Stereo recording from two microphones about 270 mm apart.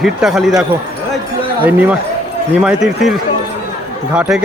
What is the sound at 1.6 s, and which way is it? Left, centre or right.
A man's voice, centre.